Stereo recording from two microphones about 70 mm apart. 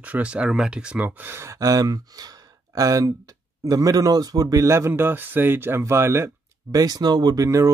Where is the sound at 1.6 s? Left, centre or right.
Right.